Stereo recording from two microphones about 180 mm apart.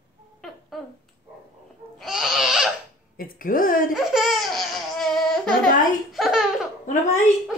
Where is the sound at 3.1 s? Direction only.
50° left (ahead or behind).